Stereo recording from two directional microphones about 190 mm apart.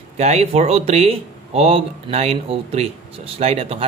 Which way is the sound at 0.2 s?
35° right (ahead or behind).